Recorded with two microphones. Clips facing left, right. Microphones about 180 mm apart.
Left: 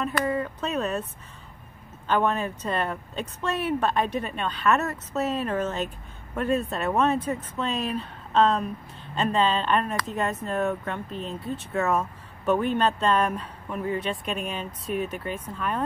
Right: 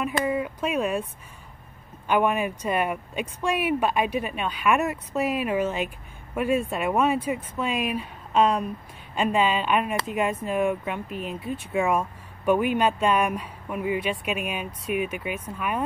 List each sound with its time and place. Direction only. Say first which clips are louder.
0.0 s speech: right 1 dB; 10° right (ahead or behind)
2.0 s speech: right 2 dB; 10° right (ahead or behind)